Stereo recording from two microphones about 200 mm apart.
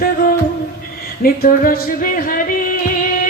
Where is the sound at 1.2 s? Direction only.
45° left (ahead or behind).